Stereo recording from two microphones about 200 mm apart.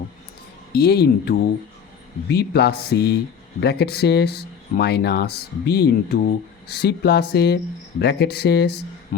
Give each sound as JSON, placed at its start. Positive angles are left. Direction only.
{"t": 0.8, "sound": "speech", "side_deg": 50}